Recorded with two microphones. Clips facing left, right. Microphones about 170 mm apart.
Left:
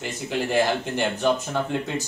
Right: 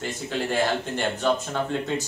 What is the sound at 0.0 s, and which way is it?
Speech, 10° left (ahead or behind).